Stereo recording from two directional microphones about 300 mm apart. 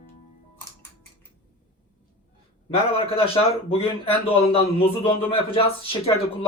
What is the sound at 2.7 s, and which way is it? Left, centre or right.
A man's voice, centre.